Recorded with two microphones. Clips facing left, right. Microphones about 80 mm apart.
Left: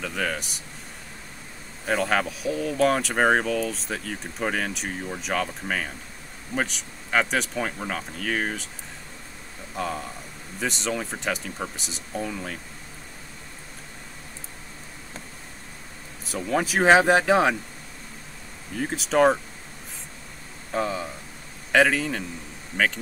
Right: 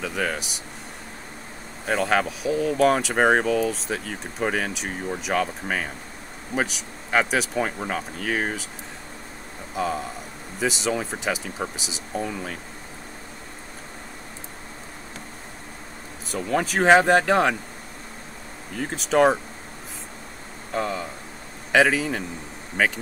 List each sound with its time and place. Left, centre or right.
0.0 s speech: centre
1.9 s speech: centre
9.8 s speech: centre
16.3 s speech: centre
18.8 s speech: centre
20.7 s speech: centre
22.7 s speech: right